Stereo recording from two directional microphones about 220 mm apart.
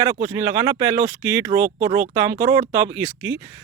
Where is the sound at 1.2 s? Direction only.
10° right (ahead or behind).